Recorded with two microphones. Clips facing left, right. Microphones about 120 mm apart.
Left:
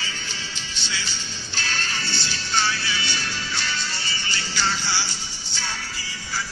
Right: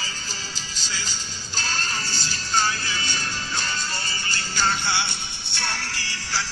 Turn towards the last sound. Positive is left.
turn(degrees=-90)